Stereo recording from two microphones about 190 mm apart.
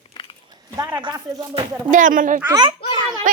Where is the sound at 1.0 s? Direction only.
25° right (ahead or behind).